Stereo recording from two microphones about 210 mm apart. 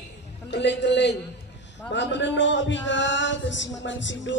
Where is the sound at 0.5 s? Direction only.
55° left (ahead or behind).